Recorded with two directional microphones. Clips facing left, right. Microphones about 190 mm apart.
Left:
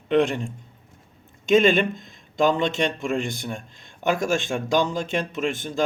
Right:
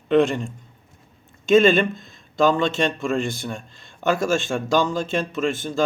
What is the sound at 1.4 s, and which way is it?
Speech, 15° left (ahead or behind).